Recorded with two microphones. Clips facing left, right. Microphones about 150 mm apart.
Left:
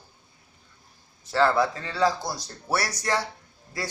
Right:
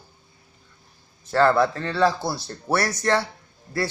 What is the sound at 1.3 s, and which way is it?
Speech, 55° right (ahead or behind).